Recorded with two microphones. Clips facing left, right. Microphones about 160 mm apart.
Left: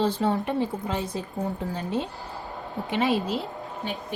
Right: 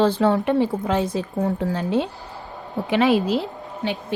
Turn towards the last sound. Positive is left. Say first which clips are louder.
# right 6 dB
turn(degrees=-85)